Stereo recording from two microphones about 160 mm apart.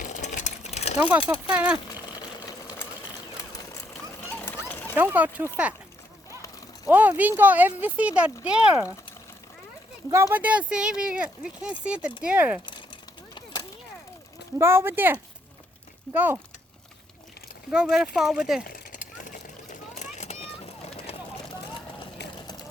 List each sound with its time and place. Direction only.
0.0 s sewing machine: 50° left (ahead or behind)
0.9 s speech: 10° right (ahead or behind)
4.2 s a sound: 10° left (ahead or behind)
4.9 s speech: 10° right (ahead or behind)
6.8 s speech: 10° right (ahead or behind)
10.1 s speech: 15° right (ahead or behind)
13.3 s a sound: 25° left (ahead or behind)
14.6 s speech: 15° right (ahead or behind)
17.7 s speech: 5° right (ahead or behind)
18.6 s a sound: 60° left (ahead or behind)
20.1 s vehicle: 40° left (ahead or behind)
22.2 s vehicle: 90° left